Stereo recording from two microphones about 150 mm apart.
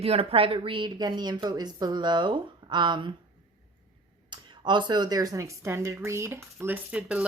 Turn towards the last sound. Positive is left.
turn(degrees=-10)  # may be behind; listen again after turning